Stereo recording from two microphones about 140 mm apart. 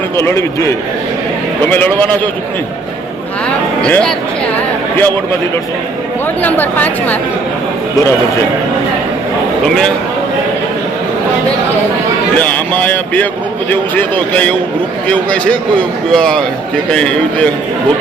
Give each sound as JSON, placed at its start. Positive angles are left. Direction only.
{"t": 0.2, "sound": "a man's voice", "side_deg": 20}
{"t": 1.7, "sound": "speech", "side_deg": 10}
{"t": 3.8, "sound": "speech", "side_deg": 10}
{"t": 4.5, "sound": "a sound", "side_deg": 15}
{"t": 6.4, "sound": "speech", "side_deg": 10}
{"t": 13.7, "sound": "a man's voice", "side_deg": 10}